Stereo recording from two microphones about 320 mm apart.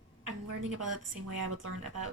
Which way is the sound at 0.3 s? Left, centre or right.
Right.